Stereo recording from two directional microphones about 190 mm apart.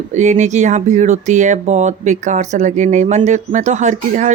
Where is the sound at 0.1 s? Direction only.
40° right (ahead or behind).